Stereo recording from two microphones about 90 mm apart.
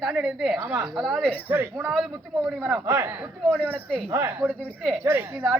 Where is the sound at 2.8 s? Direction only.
30° right (ahead or behind).